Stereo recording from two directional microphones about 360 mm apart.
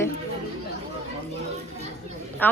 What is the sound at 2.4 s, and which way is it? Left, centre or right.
Speech, centre.